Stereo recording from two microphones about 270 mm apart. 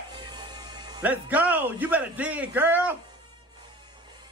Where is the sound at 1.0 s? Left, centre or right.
Centre.